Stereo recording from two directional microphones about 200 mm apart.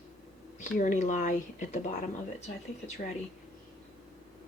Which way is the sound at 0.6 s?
40° left (ahead or behind).